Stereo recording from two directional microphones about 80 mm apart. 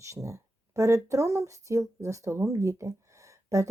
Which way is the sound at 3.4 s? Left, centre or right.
Right.